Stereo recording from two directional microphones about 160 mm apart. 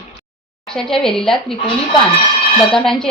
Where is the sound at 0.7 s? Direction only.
5° left (ahead or behind).